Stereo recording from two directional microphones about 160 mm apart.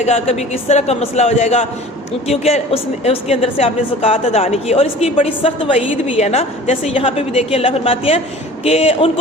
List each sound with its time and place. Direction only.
0.0 s speech: 40° left (ahead or behind)